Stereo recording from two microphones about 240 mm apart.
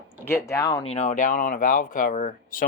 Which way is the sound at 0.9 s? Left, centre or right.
Left.